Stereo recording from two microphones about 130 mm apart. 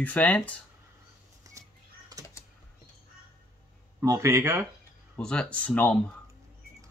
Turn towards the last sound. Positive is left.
turn(degrees=15)  # may be behind; listen again after turning